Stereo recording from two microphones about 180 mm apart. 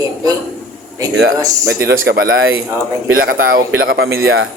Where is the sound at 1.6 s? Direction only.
65° right (ahead or behind).